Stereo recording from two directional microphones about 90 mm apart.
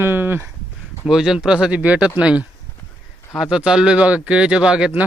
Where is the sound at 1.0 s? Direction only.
5° right (ahead or behind).